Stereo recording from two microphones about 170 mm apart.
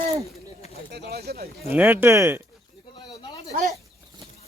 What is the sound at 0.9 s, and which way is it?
Speech, 70° right (ahead or behind).